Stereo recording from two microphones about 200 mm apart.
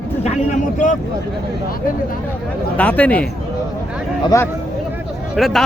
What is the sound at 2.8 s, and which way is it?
Speech, 5° left (ahead or behind).